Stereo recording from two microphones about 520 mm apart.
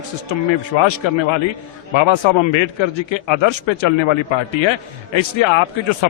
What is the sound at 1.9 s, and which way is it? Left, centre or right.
A man's voice, left.